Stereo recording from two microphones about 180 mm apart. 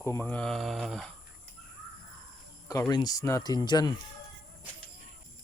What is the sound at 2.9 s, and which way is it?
Speech, 20° left (ahead or behind).